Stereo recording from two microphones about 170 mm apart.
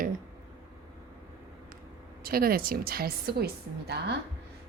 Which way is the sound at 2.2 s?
60° right (ahead or behind).